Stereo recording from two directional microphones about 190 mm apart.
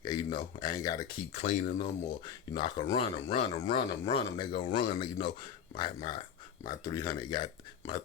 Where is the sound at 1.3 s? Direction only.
35° left (ahead or behind).